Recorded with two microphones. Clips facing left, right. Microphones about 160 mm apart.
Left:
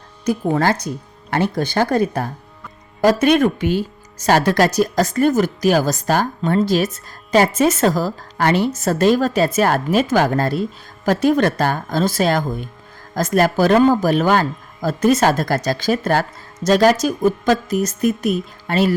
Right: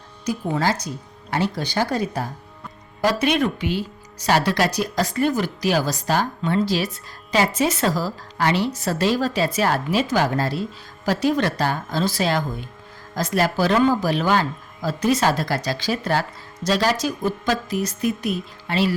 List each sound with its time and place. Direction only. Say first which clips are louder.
0.3 s speech: left 5 dB; 55° left (ahead or behind)